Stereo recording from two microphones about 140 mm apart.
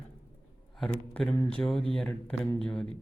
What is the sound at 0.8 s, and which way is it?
A man's voice, 5° left (ahead or behind).